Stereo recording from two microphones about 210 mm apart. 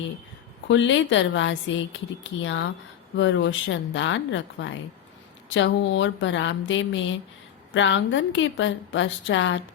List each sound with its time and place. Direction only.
0.7 s a woman's voice: 60° left (ahead or behind)